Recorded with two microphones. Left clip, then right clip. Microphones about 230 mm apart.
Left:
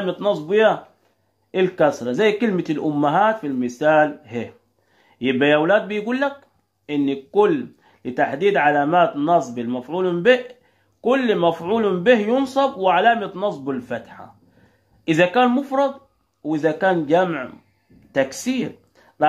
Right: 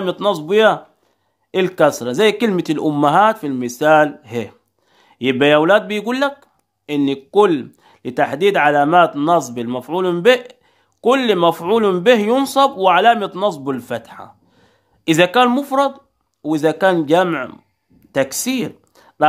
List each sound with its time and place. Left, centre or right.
0.0 s speech: right